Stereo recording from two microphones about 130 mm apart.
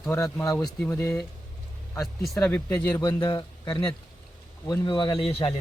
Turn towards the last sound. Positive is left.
turn(degrees=45)  # may be behind; listen again after turning